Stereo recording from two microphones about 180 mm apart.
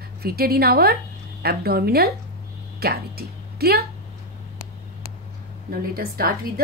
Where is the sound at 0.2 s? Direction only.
60° right (ahead or behind).